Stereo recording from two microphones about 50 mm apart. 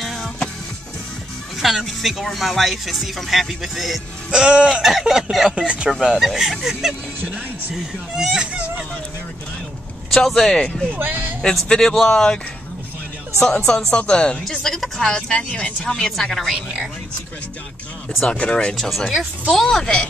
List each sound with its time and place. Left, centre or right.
0.0 s music: centre
1.6 s speech: centre
4.3 s speech: centre
4.8 s speech: centre
8.5 s music: right
10.1 s speech: centre
10.9 s speech: right
11.7 s speech: centre
13.4 s speech: centre
15.1 s speech: left
18.3 s speech: left
18.8 s speech: centre
19.5 s speech: centre